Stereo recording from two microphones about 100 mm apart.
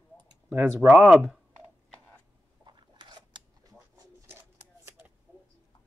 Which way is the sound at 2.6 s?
50° right (ahead or behind).